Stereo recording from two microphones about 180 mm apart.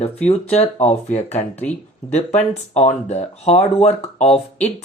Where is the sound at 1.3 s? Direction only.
10° left (ahead or behind).